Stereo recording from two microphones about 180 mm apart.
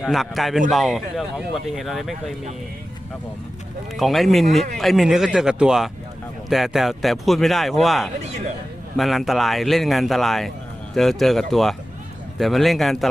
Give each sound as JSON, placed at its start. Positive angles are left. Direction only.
{"t": 0.0, "sound": "speech", "side_deg": 0}
{"t": 3.9, "sound": "speech", "side_deg": 0}